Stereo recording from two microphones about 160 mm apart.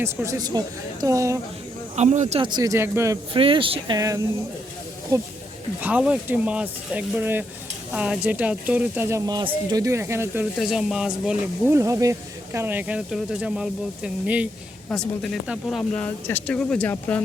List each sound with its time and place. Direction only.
0.0 s speech: 15° right (ahead or behind)
2.0 s speech: 45° right (ahead or behind)
2.4 s speech: 25° right (ahead or behind)
3.3 s speech: 35° right (ahead or behind)
5.8 s speech: 5° right (ahead or behind)
10.6 s speech: centre (ahead or behind)
11.7 s speech: 20° right (ahead or behind); by 15.8 s centre (ahead or behind)
15.8 s speech: 10° left (ahead or behind)